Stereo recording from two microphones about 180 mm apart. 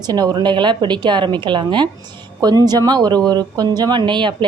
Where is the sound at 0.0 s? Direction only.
20° right (ahead or behind).